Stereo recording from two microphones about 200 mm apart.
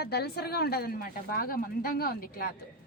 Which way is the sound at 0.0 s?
55° left (ahead or behind).